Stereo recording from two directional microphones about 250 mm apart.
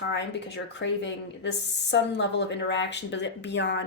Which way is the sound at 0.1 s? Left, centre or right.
Left.